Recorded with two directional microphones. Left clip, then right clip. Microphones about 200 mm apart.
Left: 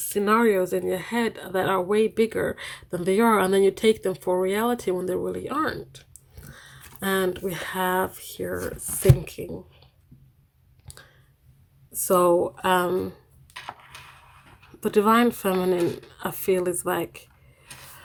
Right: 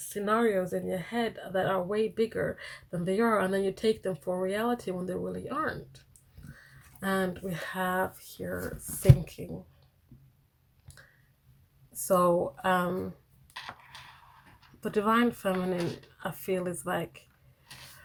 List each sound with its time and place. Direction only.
0.1 s speech: 50° left (ahead or behind); by 9.4 s 35° left (ahead or behind)
12.0 s speech: 35° left (ahead or behind)
14.8 s speech: 40° left (ahead or behind)